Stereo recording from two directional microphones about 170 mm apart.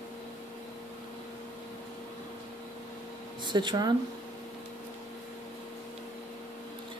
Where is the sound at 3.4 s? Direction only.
25° right (ahead or behind).